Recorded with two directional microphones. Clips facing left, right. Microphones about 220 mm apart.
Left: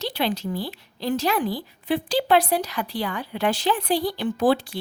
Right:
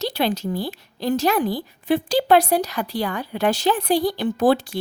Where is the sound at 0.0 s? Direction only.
40° right (ahead or behind).